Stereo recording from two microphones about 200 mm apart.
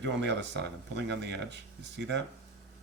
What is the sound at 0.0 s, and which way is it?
Speech, 65° right (ahead or behind).